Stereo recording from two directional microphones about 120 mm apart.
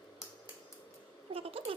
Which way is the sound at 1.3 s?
50° right (ahead or behind).